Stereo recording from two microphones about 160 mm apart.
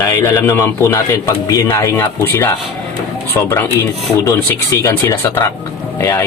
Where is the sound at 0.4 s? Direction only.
15° left (ahead or behind).